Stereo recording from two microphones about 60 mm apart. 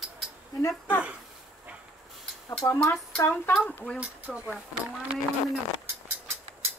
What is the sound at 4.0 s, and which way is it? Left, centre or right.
Speech, centre.